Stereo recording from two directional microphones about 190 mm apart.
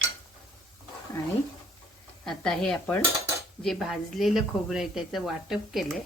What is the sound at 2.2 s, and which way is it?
Speech, 5° left (ahead or behind).